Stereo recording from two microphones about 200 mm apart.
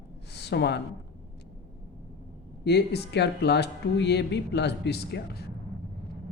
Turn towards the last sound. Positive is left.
turn(degrees=55)  # may be behind; listen again after turning